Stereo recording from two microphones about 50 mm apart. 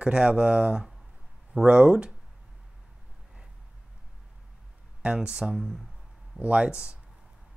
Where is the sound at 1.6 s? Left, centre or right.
Centre.